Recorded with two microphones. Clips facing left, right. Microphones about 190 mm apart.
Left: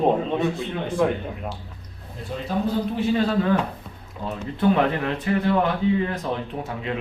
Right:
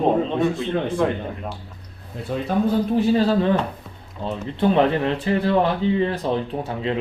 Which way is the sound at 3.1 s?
30° right (ahead or behind).